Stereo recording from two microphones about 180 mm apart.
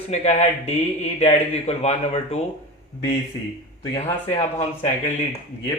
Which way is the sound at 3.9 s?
35° left (ahead or behind).